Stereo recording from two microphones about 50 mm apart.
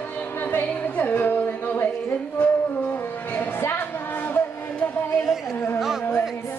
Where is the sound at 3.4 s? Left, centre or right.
Left.